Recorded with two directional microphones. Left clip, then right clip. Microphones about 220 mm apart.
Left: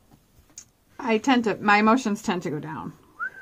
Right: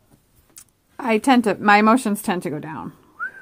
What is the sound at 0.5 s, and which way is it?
Speech, 40° right (ahead or behind).